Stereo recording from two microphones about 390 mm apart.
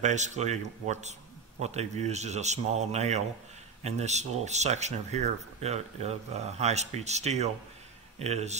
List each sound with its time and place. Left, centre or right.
0.0 s speech: centre